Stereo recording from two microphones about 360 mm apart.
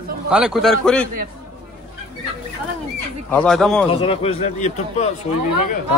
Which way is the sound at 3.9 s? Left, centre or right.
Centre.